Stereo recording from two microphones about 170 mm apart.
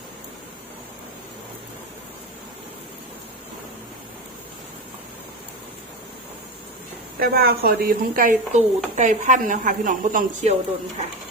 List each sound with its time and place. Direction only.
7.2 s speech: 65° right (ahead or behind)